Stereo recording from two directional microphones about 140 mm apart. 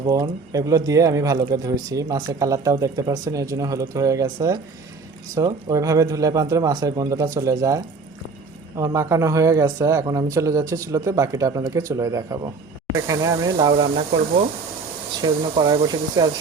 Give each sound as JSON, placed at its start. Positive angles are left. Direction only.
{"t": 0.0, "sound": "speech", "side_deg": -25}
{"t": 13.6, "sound": "speech", "side_deg": -40}
{"t": 15.2, "sound": "speech", "side_deg": -35}